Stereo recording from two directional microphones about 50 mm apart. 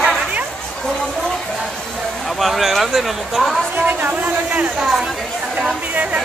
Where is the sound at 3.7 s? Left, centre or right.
Right.